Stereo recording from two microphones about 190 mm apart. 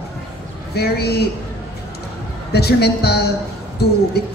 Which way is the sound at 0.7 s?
55° left (ahead or behind).